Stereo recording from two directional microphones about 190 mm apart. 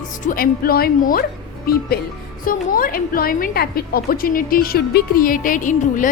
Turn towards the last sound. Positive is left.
turn(degrees=45)  # may be behind; listen again after turning